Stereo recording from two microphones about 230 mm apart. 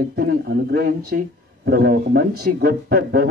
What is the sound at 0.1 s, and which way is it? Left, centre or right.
A man's voice, right.